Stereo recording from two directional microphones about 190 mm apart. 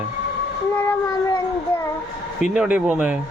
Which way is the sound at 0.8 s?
15° left (ahead or behind).